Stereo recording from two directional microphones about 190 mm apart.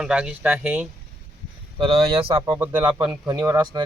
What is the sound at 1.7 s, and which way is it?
Speech, 25° right (ahead or behind).